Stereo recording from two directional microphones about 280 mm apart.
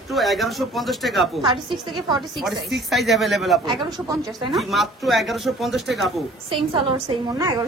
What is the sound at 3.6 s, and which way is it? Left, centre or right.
Speech, centre.